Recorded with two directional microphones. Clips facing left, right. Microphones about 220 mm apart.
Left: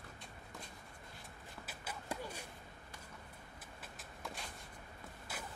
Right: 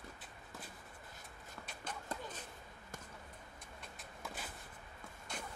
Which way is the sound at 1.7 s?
5° left (ahead or behind).